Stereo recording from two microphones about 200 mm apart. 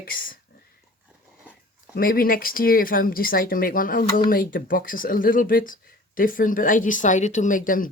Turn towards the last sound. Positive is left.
turn(degrees=45)  # may be behind; listen again after turning